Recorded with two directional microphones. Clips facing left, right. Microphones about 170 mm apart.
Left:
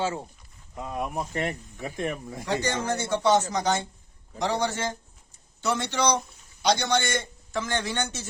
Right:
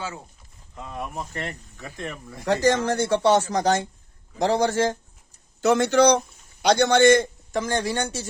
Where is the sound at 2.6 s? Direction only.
90° right.